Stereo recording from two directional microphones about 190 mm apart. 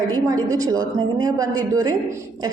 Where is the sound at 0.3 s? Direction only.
20° right (ahead or behind).